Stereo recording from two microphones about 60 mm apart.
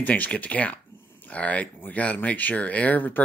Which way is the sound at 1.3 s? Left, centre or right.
Left.